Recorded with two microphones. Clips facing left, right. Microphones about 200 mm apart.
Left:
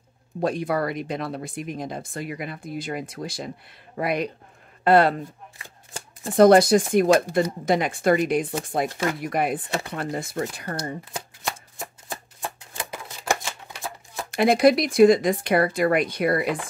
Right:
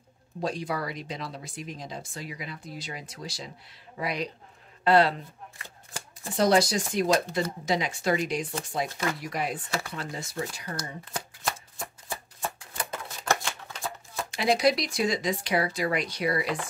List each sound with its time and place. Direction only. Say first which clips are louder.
0.4 s a man's voice: left 7 dB; 55° left (ahead or behind)
6.3 s speech: left 9 dB; 55° left (ahead or behind)
12.4 s shuffling cards: left 1 dB; 20° left (ahead or behind)
14.3 s speech: left 7 dB; 55° left (ahead or behind)